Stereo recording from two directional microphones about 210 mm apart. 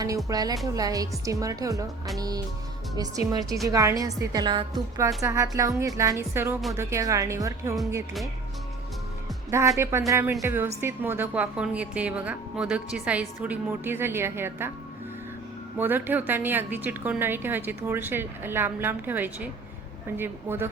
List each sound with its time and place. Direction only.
0.3 s a woman's voice: 15° right (ahead or behind)
9.5 s a woman's voice: 15° right (ahead or behind)
15.8 s a woman's voice: 10° right (ahead or behind)